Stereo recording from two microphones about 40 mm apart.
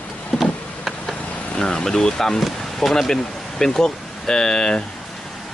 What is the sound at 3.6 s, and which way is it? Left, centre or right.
Speech, centre.